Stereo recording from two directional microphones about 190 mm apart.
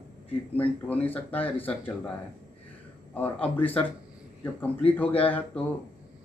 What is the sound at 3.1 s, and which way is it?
Speech, 10° left (ahead or behind).